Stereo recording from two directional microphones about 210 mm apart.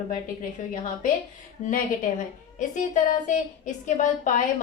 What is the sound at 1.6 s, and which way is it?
A woman's voice, 35° left (ahead or behind).